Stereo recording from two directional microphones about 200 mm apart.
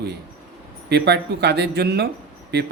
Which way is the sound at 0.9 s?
55° right (ahead or behind).